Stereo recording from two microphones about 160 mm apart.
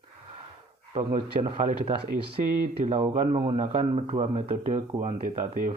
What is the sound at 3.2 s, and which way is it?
Speech, 30° right (ahead or behind).